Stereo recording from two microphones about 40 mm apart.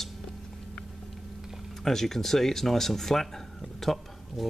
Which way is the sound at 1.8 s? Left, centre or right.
Centre.